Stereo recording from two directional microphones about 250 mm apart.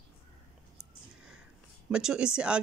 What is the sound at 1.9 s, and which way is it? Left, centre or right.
Speech, centre.